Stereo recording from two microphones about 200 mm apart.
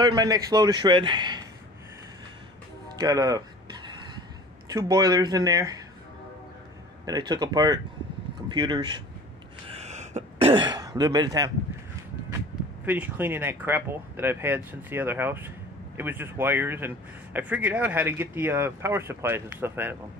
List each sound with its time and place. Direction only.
0.0 s a man's voice: 20° right (ahead or behind)
3.0 s a sound: 20° right (ahead or behind)
4.6 s a man's voice: 20° right (ahead or behind)
7.1 s a man's voice: 20° right (ahead or behind)
9.7 s throat clearing: 35° right (ahead or behind)
12.8 s speech: 10° right (ahead or behind)